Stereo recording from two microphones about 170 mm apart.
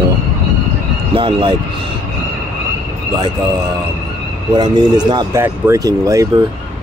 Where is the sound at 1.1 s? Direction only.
30° right (ahead or behind).